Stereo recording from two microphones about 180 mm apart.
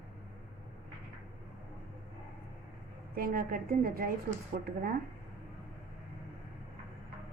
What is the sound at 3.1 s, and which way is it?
Speech, 55° right (ahead or behind).